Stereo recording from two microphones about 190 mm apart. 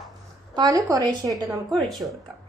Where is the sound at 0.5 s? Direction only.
20° right (ahead or behind).